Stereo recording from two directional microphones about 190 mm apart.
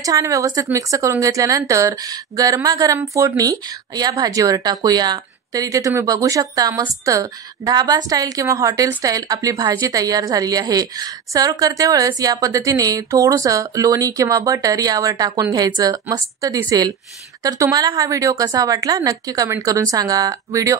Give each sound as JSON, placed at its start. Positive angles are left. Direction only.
{"t": 0.0, "sound": "a woman's voice", "side_deg": -15}